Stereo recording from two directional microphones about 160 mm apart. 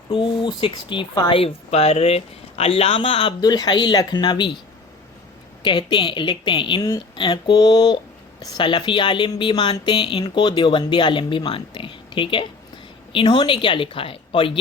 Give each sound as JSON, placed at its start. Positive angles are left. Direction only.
{"t": 0.1, "sound": "speech", "side_deg": 30}
{"t": 1.4, "sound": "speech", "side_deg": 40}
{"t": 5.6, "sound": "speech", "side_deg": 30}